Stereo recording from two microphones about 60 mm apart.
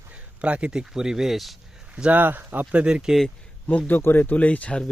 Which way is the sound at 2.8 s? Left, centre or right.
Centre.